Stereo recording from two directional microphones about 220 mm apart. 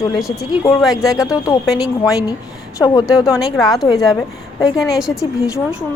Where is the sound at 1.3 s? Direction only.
15° left (ahead or behind).